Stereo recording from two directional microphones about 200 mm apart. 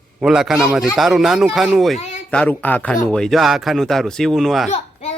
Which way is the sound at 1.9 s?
35° left (ahead or behind).